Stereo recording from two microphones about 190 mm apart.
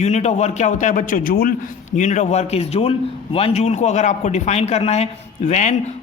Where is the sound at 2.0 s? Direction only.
35° left (ahead or behind).